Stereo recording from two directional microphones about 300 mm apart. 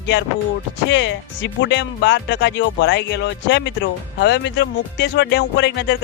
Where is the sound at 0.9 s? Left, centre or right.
Left.